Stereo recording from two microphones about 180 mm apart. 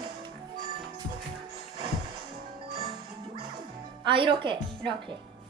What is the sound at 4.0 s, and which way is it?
Speech, 30° right (ahead or behind).